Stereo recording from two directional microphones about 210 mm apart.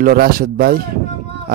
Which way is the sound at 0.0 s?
45° right (ahead or behind).